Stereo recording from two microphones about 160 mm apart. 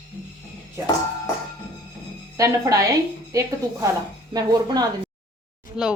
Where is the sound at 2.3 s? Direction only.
20° right (ahead or behind).